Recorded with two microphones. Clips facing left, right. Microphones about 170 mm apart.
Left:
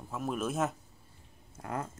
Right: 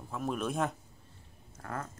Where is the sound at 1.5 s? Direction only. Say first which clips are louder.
Left 3 dB; 15° left (ahead or behind).